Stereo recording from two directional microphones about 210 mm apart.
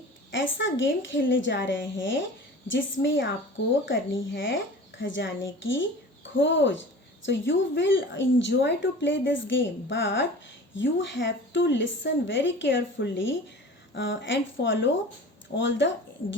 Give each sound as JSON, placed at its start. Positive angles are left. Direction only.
{"t": 0.3, "sound": "a woman's voice", "side_deg": 65}